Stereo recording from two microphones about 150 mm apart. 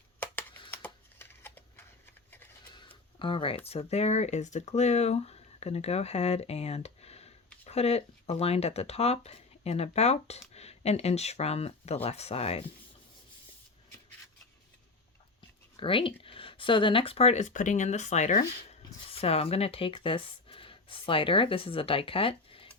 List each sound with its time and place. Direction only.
0.2 s a sound: 10° left (ahead or behind)
0.7 s typing: 15° left (ahead or behind)
3.2 s speech: 35° left (ahead or behind)
15.4 s speech: 35° left (ahead or behind); by 18.8 s 55° left (ahead or behind)
19.0 s speech: 40° left (ahead or behind)